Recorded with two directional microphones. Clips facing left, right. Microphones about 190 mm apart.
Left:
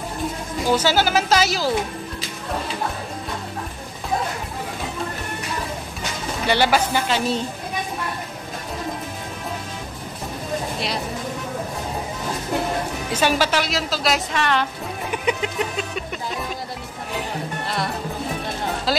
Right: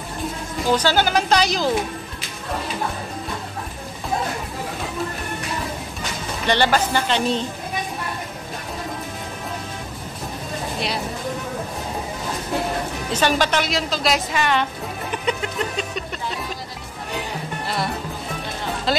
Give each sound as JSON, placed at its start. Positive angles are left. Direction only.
{"t": 0.7, "sound": "speech", "side_deg": 10}
{"t": 6.4, "sound": "speech", "side_deg": 10}
{"t": 13.1, "sound": "speech", "side_deg": 5}
{"t": 15.2, "sound": "music", "side_deg": 10}
{"t": 18.9, "sound": "music", "side_deg": 0}